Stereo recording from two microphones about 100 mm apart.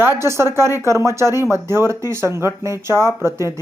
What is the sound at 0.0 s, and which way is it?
Speech, 25° right (ahead or behind).